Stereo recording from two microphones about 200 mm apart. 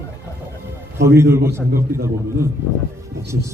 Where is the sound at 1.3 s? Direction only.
15° right (ahead or behind).